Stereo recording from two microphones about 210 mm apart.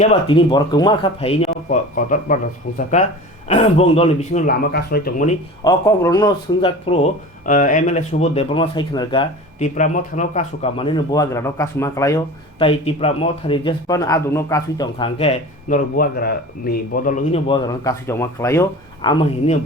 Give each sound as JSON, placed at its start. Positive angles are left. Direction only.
{"t": 0.0, "sound": "speech", "side_deg": 30}
{"t": 3.5, "sound": "speech", "side_deg": 30}
{"t": 5.6, "sound": "speech", "side_deg": 15}
{"t": 9.6, "sound": "speech", "side_deg": 35}
{"t": 12.6, "sound": "speech", "side_deg": 25}
{"t": 17.4, "sound": "speech", "side_deg": 20}